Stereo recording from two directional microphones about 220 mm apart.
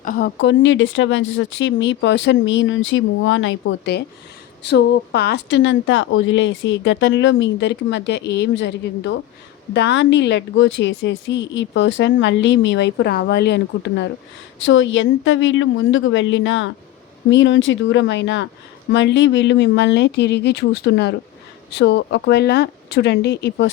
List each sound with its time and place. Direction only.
0.0 s speech: 40° left (ahead or behind)
0.3 s speech: 55° left (ahead or behind)